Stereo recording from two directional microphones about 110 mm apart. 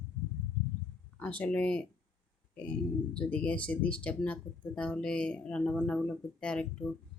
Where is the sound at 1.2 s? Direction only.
10° left (ahead or behind).